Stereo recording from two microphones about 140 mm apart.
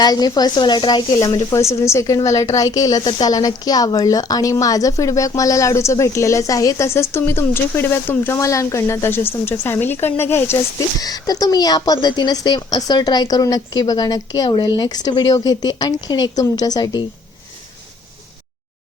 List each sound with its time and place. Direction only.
0.0 s a woman's voice: 30° left (ahead or behind)